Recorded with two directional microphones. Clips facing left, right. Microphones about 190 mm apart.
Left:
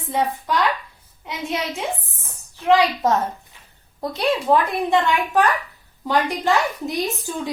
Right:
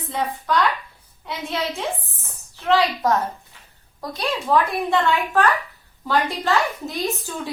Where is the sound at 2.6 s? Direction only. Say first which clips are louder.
Left 2 dB; 20° left (ahead or behind).